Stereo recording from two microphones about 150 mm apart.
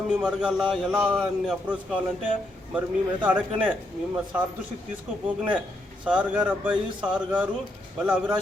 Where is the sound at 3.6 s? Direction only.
10° right (ahead or behind).